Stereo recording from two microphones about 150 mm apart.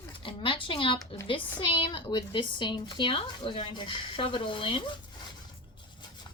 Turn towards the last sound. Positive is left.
turn(degrees=35)  # may be behind; listen again after turning